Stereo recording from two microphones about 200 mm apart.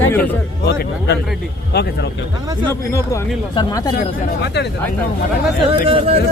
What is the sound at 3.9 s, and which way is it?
Speech, 55° left (ahead or behind).